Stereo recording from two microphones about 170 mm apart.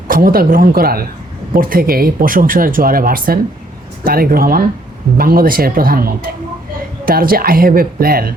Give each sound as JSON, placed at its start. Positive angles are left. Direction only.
{"t": 0.1, "sound": "speech", "side_deg": -60}